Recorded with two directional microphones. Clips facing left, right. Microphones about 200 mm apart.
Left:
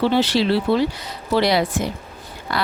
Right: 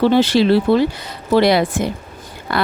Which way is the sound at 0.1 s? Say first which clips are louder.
Right 5 dB; 50° right (ahead or behind).